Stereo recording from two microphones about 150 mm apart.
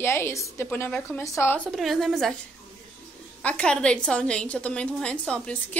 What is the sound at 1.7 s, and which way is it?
Speech, centre (ahead or behind).